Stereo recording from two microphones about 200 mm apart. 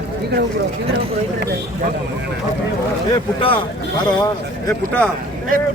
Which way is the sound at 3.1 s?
25° left (ahead or behind).